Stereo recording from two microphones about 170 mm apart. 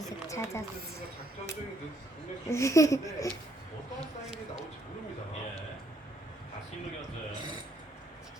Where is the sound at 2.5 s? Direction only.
15° left (ahead or behind).